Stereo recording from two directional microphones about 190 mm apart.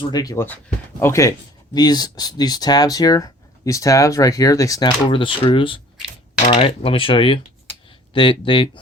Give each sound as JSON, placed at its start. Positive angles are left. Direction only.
{"t": 0.0, "sound": "speech", "side_deg": 20}
{"t": 5.0, "sound": "speech", "side_deg": 30}